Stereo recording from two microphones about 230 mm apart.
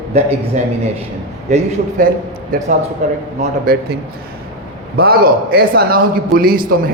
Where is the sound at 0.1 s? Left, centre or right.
Right.